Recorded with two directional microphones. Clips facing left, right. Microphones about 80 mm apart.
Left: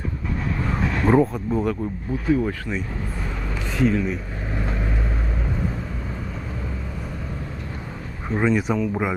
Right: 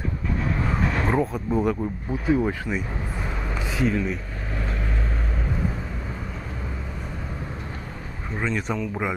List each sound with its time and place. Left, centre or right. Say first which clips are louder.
0.7 s a sound: left 6 dB; centre
2.2 s speech: even; centre
3.7 s speech: left 3 dB; centre
8.4 s speech: left 6 dB; centre